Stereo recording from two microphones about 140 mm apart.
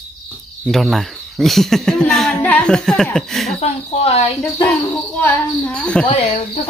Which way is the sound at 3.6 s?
45° left (ahead or behind).